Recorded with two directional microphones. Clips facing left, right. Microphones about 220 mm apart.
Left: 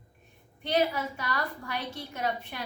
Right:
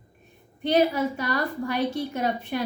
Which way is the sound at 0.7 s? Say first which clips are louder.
Right 6 dB; 40° right (ahead or behind).